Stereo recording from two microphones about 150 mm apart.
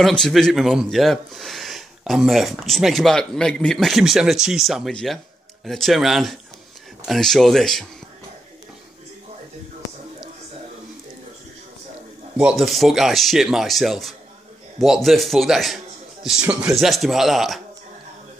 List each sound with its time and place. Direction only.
0.0 s speech: centre (ahead or behind)
12.4 s speech: 5° right (ahead or behind)